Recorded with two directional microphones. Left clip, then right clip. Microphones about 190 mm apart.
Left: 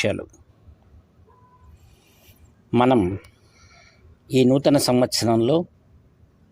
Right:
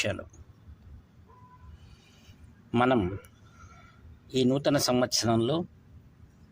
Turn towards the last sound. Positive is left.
turn(degrees=25)  # may be behind; listen again after turning